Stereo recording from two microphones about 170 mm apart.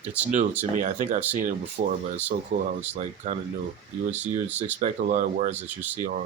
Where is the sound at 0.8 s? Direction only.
50° right (ahead or behind).